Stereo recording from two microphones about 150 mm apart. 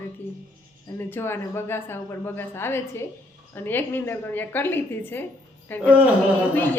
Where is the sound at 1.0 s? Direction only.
15° left (ahead or behind).